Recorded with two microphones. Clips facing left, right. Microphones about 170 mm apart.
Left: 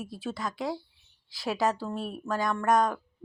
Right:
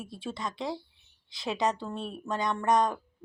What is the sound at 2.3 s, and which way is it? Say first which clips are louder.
Speech: left 1 dB; 20° right (ahead or behind).